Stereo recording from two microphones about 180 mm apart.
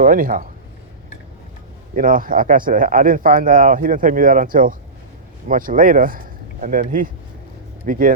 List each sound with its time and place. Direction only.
0.0 s speech: 50° right (ahead or behind)
2.0 s speech: 50° right (ahead or behind)